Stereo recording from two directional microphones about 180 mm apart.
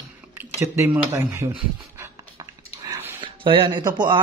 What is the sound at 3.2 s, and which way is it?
Speech, 30° right (ahead or behind).